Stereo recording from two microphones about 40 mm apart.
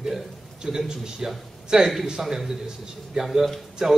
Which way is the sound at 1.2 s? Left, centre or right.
Centre.